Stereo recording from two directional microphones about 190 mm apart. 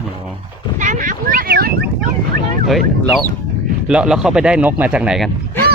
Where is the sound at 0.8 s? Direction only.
40° right (ahead or behind).